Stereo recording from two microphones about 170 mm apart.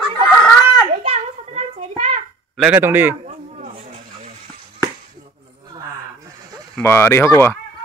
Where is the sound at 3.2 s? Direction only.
45° right (ahead or behind).